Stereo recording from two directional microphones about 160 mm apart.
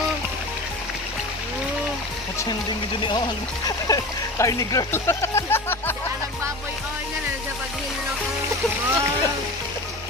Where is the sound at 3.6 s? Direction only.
25° left (ahead or behind).